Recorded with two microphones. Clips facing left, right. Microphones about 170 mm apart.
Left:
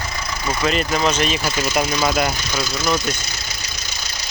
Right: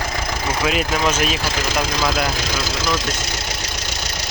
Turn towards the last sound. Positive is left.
turn(degrees=-90)